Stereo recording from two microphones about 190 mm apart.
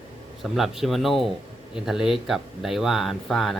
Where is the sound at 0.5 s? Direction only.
Centre (ahead or behind).